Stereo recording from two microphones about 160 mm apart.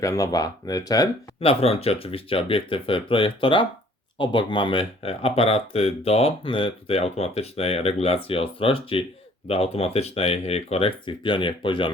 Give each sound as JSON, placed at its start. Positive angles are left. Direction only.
{"t": 0.0, "sound": "speech", "side_deg": 20}
{"t": 1.4, "sound": "speech", "side_deg": 35}